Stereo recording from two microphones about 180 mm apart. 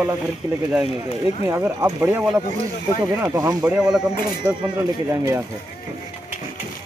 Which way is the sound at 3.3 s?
20° right (ahead or behind).